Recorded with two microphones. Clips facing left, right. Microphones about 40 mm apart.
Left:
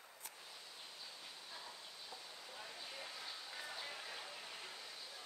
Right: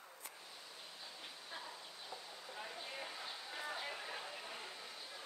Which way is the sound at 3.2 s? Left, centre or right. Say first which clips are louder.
Right 3 dB; right.